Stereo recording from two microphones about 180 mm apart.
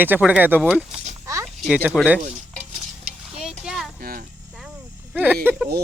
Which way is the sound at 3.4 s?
Centre (ahead or behind).